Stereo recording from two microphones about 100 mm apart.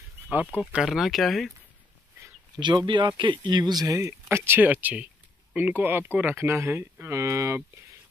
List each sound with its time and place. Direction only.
0.3 s speech: 15° right (ahead or behind)
0.8 s speech: centre (ahead or behind)
2.6 s speech: 50° right (ahead or behind)
3.9 s speech: 25° right (ahead or behind)